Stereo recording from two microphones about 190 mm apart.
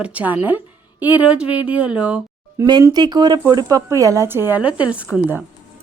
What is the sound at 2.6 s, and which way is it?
A woman's voice, 20° right (ahead or behind).